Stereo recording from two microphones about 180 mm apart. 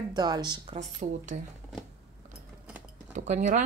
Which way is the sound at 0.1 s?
25° right (ahead or behind).